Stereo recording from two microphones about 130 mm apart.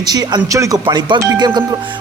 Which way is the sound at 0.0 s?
30° right (ahead or behind).